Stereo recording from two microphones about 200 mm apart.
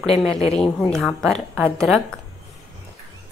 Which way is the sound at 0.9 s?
Centre (ahead or behind).